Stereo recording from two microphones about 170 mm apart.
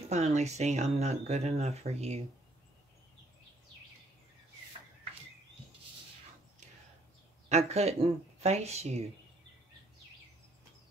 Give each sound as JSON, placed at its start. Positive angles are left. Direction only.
{"t": 0.1, "sound": "speech", "side_deg": -40}
{"t": 7.4, "sound": "speech", "side_deg": -40}